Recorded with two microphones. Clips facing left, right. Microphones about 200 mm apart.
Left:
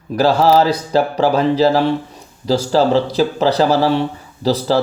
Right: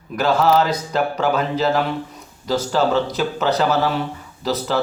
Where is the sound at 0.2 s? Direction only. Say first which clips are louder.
Left 4 dB; 35° left (ahead or behind).